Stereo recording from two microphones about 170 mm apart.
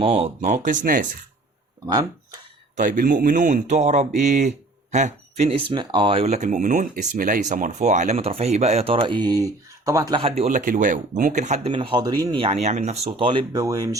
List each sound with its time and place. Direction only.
0.0 s speech: 35° right (ahead or behind)
2.7 s speech: 50° right (ahead or behind); by 10.5 s 35° right (ahead or behind)
10.5 s speech: 50° right (ahead or behind)
11.7 s speech: 30° right (ahead or behind)